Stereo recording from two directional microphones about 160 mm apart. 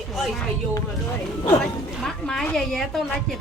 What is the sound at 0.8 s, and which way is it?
Speech, 20° left (ahead or behind).